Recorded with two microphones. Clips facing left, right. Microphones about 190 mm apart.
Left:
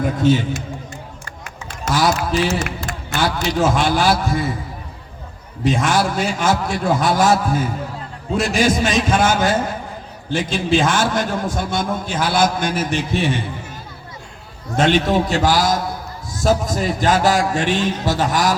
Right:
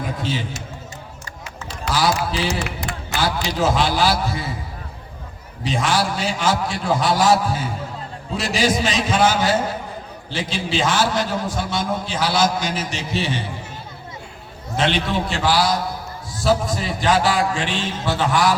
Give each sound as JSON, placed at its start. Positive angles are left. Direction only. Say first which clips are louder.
{"t": 0.0, "sound": "a man's voice", "louder": "left 9 dB", "side_deg": 50}
{"t": 1.6, "sound": "a man's voice", "louder": "left 2 dB", "side_deg": 50}
{"t": 5.6, "sound": "a man's voice", "louder": "left 3 dB", "side_deg": 50}
{"t": 14.8, "sound": "a man's voice", "louder": "left 5 dB", "side_deg": 45}